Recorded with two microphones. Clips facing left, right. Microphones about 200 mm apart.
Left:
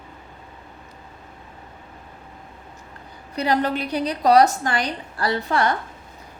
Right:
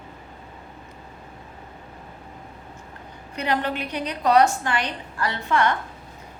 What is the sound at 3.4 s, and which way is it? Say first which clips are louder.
A woman's voice: left 4 dB; 35° left (ahead or behind).